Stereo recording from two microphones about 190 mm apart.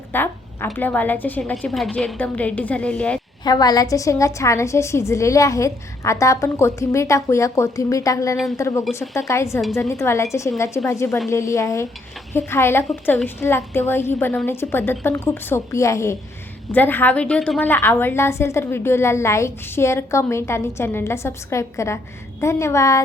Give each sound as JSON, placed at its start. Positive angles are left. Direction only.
{"t": 0.1, "sound": "a woman's voice", "side_deg": 10}
{"t": 3.4, "sound": "a woman's voice", "side_deg": 20}